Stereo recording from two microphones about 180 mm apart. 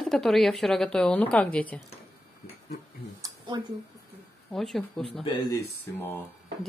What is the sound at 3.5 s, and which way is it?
Speech, 25° right (ahead or behind).